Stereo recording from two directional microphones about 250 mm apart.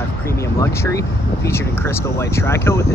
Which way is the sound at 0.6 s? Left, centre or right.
Centre.